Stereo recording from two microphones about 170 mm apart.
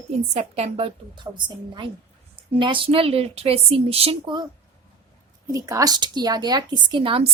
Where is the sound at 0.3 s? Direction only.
40° right (ahead or behind).